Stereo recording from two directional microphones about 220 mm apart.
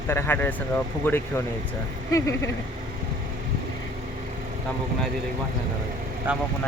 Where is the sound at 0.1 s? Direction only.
10° left (ahead or behind).